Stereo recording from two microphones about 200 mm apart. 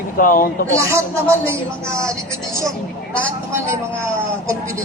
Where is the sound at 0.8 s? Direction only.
15° right (ahead or behind).